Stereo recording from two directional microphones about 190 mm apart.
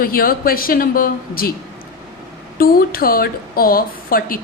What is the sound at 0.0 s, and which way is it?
A woman's voice, 50° left (ahead or behind).